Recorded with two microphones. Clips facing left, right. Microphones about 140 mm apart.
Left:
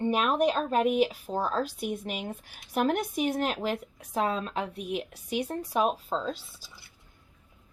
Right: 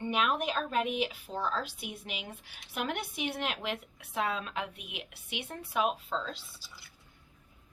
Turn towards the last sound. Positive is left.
turn(degrees=40)  # may be behind; listen again after turning